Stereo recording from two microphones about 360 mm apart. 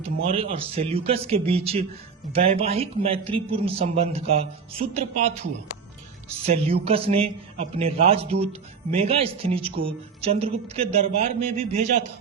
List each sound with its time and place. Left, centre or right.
0.3 s speech: centre